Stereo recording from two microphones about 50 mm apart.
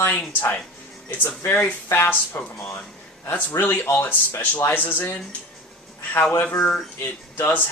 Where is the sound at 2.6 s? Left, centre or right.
Left.